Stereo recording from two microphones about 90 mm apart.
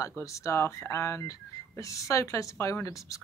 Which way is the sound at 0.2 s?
35° left (ahead or behind).